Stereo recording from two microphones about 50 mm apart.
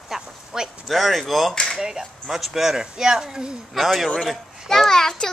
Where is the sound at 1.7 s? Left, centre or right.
Centre.